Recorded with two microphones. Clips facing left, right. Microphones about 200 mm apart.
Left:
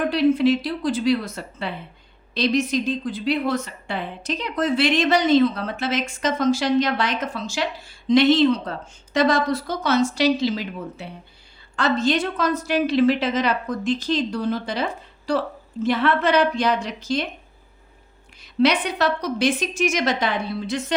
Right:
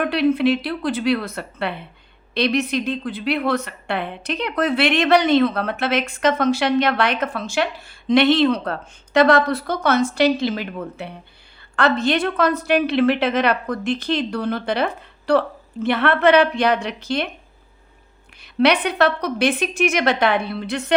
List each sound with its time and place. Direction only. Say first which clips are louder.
0.0 s a woman's voice: even; 65° right (ahead or behind)
18.6 s a woman's voice: right 3 dB; 60° right (ahead or behind)